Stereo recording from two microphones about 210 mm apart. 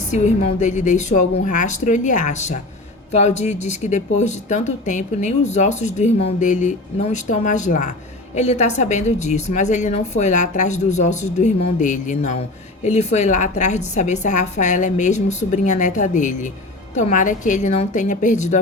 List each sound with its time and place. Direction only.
0.1 s speech: 35° left (ahead or behind)